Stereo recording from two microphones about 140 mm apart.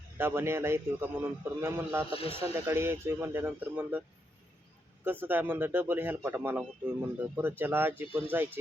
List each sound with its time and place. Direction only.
0.2 s speech: 15° right (ahead or behind)
2.1 s speech: 40° left (ahead or behind)
2.4 s speech: 15° right (ahead or behind)
5.2 s speech: 15° right (ahead or behind)